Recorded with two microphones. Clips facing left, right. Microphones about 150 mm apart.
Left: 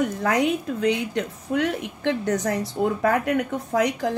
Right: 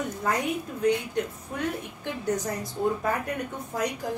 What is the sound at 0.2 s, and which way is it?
A woman's voice, 90° left.